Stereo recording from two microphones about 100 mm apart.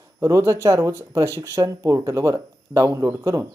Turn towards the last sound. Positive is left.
turn(degrees=-30)  # may be behind; listen again after turning